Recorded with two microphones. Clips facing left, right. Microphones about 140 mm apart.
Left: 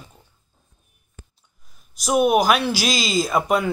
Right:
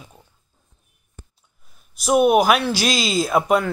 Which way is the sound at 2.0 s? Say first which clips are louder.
Right 2 dB; centre (ahead or behind).